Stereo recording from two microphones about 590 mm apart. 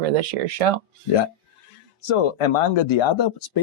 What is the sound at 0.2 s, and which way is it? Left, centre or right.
Speech, right.